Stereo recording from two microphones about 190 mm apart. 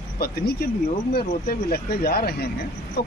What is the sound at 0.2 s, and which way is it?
Speech, 55° left (ahead or behind).